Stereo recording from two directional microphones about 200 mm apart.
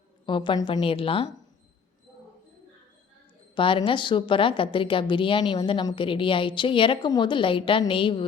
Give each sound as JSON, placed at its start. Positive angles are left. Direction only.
{"t": 0.3, "sound": "a woman's voice", "side_deg": 25}
{"t": 3.5, "sound": "a woman's voice", "side_deg": 25}